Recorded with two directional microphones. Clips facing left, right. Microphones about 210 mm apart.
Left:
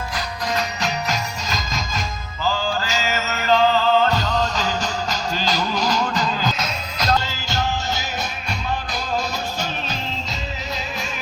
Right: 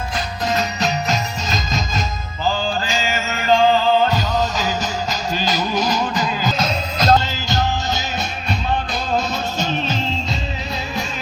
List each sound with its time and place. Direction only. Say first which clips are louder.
0.4 s music: right 4 dB; 25° right (ahead or behind)
6.6 s music: right 6 dB; 30° right (ahead or behind)